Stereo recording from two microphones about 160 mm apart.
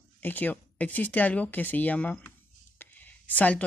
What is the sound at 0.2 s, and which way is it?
Speech, 10° left (ahead or behind).